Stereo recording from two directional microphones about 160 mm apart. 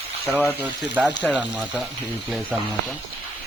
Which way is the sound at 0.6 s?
10° right (ahead or behind).